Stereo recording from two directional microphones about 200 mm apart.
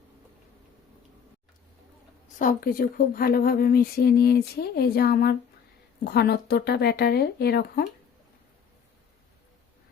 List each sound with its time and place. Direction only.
2.4 s speech: 45° left (ahead or behind)